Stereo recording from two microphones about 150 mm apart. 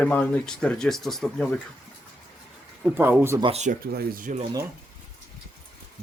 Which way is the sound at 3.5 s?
50° right (ahead or behind).